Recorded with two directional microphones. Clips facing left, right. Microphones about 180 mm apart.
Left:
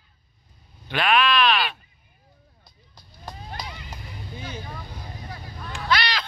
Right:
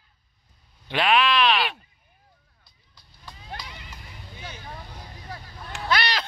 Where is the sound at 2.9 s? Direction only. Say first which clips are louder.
Left 8 dB; 45° left (ahead or behind).